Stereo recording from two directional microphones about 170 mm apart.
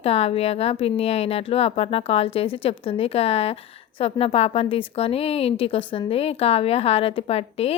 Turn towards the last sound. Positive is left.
turn(degrees=35)  # may be behind; listen again after turning